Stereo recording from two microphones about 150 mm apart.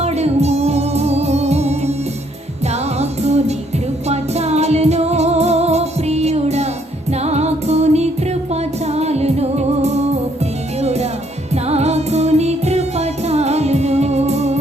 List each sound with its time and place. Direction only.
0.0 s music: 45° right (ahead or behind)
3.0 s music: 45° right (ahead or behind)